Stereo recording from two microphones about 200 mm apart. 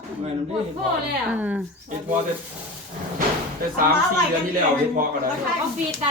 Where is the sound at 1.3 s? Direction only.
10° right (ahead or behind).